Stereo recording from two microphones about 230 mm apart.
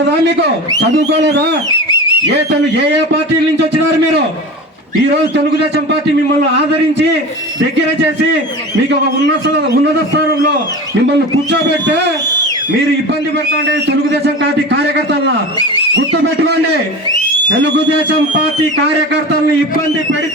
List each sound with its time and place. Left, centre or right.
1.0 s a man's voice: right
9.2 s a man's voice: right
15.5 s speech: centre